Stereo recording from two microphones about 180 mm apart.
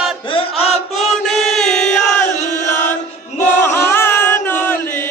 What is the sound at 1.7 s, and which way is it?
Crowd, 5° left (ahead or behind).